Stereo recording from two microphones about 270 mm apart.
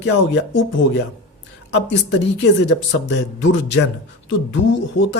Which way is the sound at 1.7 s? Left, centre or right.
Left.